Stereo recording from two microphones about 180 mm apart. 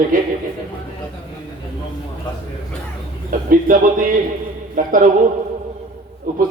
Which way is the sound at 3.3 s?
50° right (ahead or behind).